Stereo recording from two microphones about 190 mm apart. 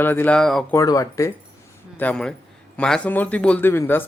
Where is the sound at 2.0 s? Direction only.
5° left (ahead or behind).